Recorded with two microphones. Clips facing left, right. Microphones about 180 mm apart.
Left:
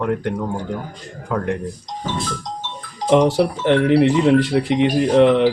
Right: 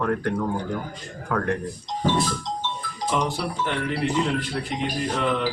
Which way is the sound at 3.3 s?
75° left (ahead or behind).